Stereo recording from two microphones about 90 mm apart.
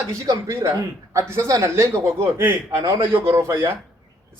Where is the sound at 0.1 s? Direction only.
40° right (ahead or behind).